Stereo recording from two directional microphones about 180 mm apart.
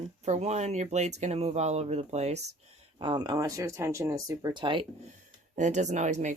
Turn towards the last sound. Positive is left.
turn(degrees=-40)  # may be behind; listen again after turning